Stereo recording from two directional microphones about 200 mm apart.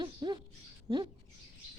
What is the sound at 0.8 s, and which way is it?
Bird, 20° right (ahead or behind).